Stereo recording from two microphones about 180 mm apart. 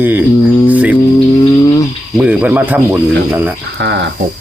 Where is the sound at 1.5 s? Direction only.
20° left (ahead or behind).